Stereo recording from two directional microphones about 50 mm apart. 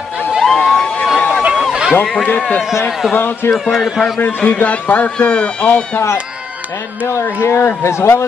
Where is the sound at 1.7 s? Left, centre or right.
Centre.